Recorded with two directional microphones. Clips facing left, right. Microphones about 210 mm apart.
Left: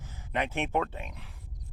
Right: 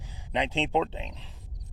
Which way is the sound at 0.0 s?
15° right (ahead or behind).